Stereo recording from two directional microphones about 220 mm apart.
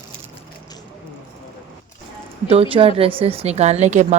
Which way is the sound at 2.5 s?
25° right (ahead or behind).